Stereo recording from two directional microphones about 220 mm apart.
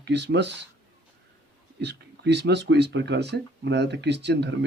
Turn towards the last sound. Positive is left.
turn(degrees=-50)  # may be behind; listen again after turning